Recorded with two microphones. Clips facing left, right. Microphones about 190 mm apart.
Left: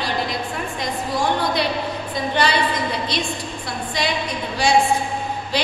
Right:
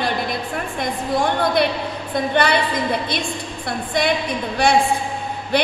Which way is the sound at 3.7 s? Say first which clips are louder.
Right 5 dB; 55° right (ahead or behind).